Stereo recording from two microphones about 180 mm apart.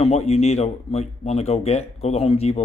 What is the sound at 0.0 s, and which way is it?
Speech, 35° left (ahead or behind).